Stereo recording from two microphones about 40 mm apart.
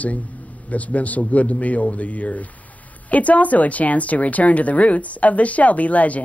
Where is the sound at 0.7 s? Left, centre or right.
Left.